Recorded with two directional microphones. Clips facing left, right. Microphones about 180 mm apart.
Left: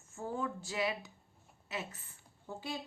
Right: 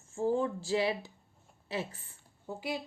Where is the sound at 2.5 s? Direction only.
10° right (ahead or behind).